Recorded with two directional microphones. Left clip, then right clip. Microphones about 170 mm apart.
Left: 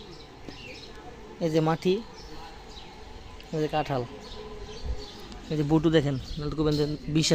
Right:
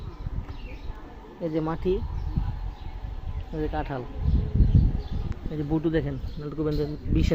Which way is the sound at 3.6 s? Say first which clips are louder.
Left 3 dB; 45° left (ahead or behind).